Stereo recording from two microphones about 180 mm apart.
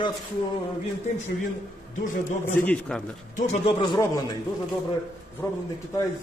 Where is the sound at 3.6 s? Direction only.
25° left (ahead or behind).